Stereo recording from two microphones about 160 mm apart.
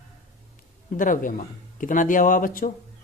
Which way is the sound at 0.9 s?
55° left (ahead or behind).